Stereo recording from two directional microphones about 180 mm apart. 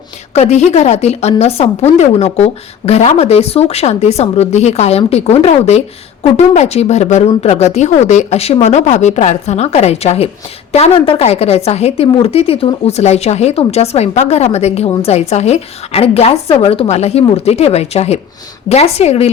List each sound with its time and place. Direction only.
0.3 s a woman's voice: 40° left (ahead or behind)